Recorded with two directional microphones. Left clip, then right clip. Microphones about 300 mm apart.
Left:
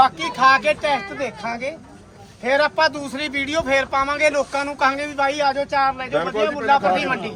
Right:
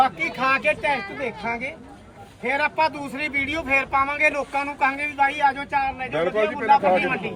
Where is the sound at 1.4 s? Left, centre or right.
Centre.